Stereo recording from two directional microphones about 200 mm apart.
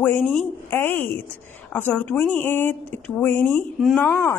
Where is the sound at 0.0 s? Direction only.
10° left (ahead or behind).